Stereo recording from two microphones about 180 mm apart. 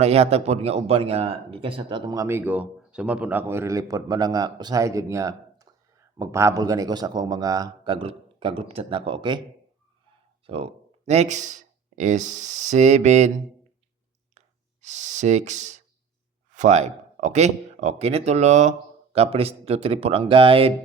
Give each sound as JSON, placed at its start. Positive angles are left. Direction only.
{"t": 0.0, "sound": "speech", "side_deg": -35}
{"t": 10.4, "sound": "speech", "side_deg": -35}
{"t": 14.3, "sound": "clicking", "side_deg": -40}
{"t": 16.5, "sound": "speech", "side_deg": -40}